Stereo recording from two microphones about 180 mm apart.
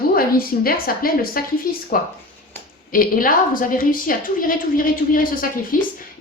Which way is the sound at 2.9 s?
50° left (ahead or behind).